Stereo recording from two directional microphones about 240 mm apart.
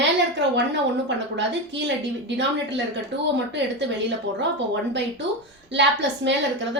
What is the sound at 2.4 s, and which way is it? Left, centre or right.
Speech, right.